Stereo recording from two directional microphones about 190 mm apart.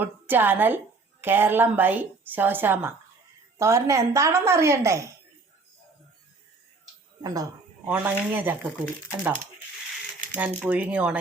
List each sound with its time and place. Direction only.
0.0 s a woman's voice: 10° right (ahead or behind)
7.2 s a woman's voice: 20° right (ahead or behind)
10.3 s a woman's voice: 5° right (ahead or behind)